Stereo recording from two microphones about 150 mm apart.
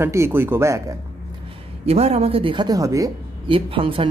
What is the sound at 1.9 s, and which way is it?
Speech, 45° right (ahead or behind).